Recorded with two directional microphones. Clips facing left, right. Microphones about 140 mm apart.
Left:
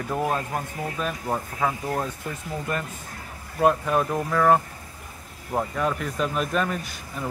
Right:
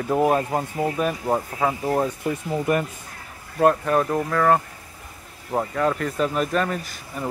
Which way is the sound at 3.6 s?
Centre (ahead or behind).